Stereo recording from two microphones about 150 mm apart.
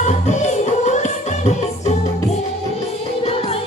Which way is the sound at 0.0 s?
50° left (ahead or behind).